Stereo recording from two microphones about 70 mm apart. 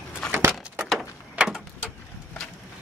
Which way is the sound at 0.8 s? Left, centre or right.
Centre.